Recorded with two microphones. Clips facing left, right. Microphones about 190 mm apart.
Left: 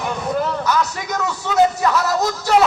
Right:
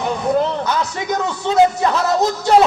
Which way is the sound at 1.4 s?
30° right (ahead or behind).